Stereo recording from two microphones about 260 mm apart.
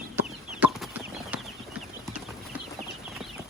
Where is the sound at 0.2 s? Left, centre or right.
Centre.